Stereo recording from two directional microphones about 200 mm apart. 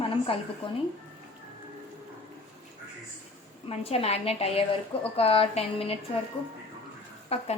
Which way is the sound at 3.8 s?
30° left (ahead or behind).